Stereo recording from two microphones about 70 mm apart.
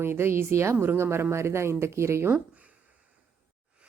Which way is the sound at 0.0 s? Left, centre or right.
Right.